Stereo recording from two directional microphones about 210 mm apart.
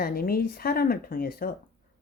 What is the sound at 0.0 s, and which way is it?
A woman's voice, 45° left (ahead or behind).